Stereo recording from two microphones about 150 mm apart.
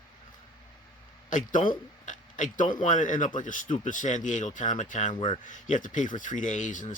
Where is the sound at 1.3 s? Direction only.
60° left (ahead or behind).